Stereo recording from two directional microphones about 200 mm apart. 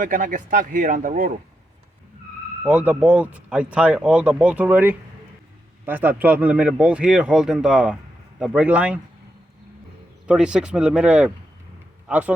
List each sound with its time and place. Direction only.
0.0 s speech: 40° right (ahead or behind)
2.6 s a man's voice: 5° right (ahead or behind)
10.2 s a man's voice: 5° right (ahead or behind)